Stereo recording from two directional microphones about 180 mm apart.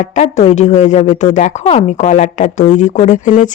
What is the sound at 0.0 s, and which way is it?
Speech, 40° left (ahead or behind).